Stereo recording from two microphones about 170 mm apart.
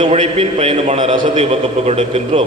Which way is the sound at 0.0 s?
35° right (ahead or behind).